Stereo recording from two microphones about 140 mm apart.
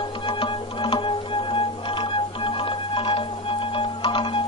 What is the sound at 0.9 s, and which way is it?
Music, 35° left (ahead or behind).